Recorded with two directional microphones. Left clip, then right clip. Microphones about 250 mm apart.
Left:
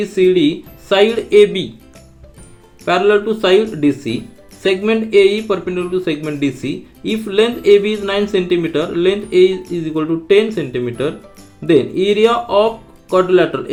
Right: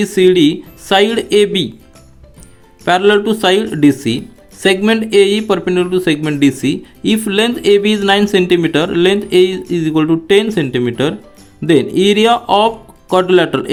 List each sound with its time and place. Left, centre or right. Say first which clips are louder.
0.0 s speech: right 3 dB; right
2.8 s speech: right 2 dB; right